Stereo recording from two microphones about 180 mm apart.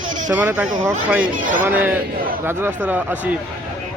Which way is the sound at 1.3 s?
45° right (ahead or behind).